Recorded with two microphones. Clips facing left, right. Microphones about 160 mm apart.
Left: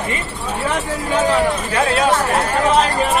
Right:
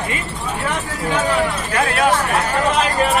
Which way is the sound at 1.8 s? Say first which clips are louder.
Left 1 dB; 25° left (ahead or behind).